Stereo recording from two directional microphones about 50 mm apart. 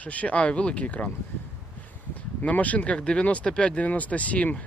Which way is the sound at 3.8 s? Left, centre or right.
Left.